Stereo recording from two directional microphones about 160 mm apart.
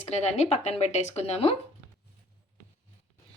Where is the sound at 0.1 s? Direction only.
45° left (ahead or behind).